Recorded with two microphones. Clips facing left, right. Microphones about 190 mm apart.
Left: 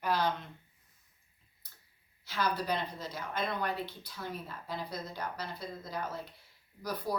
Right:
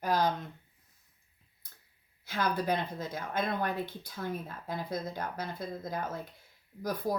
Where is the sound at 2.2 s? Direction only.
50° right (ahead or behind).